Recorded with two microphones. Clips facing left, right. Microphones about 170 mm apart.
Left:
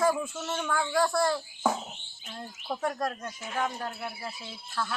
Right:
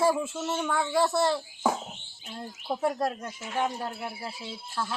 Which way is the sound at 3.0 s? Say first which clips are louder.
Right 2 dB; 25° right (ahead or behind).